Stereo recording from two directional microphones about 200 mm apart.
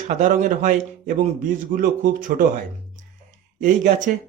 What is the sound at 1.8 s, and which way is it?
Speech, 40° right (ahead or behind).